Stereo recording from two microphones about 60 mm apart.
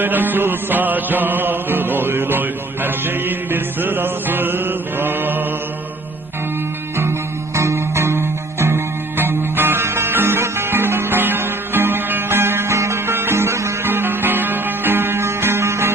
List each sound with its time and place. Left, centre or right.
0.0 s music: right
7.5 s music: right
13.8 s music: right